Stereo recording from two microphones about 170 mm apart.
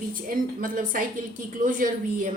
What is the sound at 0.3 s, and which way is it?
Speech, 55° right (ahead or behind).